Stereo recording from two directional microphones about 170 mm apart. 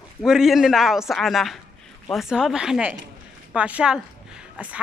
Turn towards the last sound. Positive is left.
turn(degrees=-5)  # may be behind; listen again after turning